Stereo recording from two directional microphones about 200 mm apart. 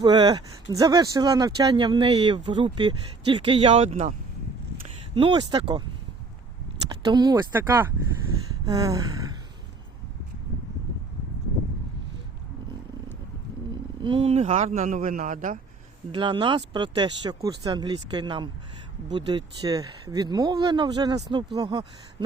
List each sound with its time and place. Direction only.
0.0 s speech: 20° right (ahead or behind)
5.1 s speech: 25° right (ahead or behind)
6.8 s speech: 20° right (ahead or behind)
8.6 s a sound: 20° right (ahead or behind)
14.0 s a man's voice: 25° right (ahead or behind)
16.1 s speech: 25° right (ahead or behind)